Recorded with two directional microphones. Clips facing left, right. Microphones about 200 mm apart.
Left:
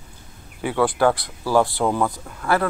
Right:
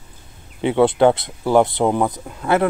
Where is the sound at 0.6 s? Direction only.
25° right (ahead or behind).